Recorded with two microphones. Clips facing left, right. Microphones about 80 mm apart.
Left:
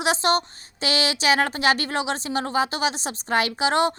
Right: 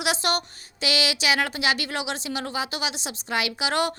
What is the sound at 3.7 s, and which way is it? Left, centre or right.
Speech, left.